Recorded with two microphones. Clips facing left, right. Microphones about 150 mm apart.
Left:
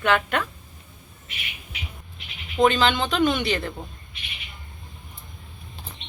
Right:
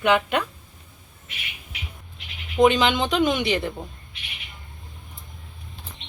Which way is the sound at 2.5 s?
15° right (ahead or behind).